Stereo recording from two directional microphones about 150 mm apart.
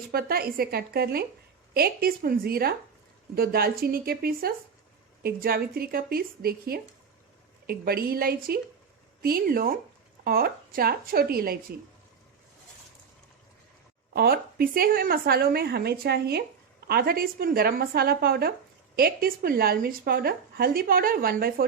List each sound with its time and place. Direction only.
0.1 s a woman's voice: 90° right
14.1 s a woman's voice: 90° right